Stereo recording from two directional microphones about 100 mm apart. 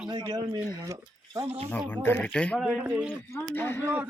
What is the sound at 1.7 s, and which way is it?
Speech, 15° left (ahead or behind).